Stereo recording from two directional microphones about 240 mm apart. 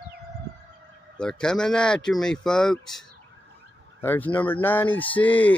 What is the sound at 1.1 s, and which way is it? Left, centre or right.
Speech, centre.